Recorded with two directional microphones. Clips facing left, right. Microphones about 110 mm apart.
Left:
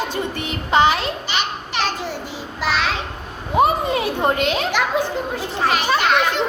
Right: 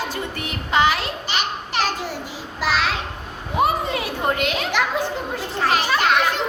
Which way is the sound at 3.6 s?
25° left (ahead or behind).